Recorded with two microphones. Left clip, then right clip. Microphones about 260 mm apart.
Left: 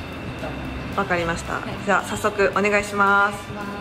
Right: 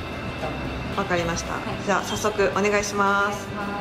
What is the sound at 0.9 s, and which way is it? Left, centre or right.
Speech, centre.